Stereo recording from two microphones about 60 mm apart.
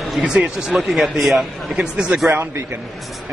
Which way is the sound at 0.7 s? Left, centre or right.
Centre.